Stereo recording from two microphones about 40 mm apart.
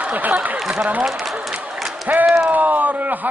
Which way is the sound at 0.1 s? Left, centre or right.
Right.